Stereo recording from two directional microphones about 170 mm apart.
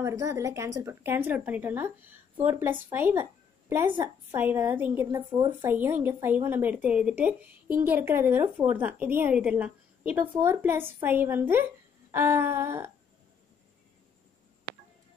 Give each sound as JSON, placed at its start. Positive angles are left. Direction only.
{"t": 0.0, "sound": "a woman's voice", "side_deg": -15}